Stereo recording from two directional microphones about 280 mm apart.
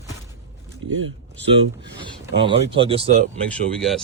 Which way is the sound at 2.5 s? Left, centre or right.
Centre.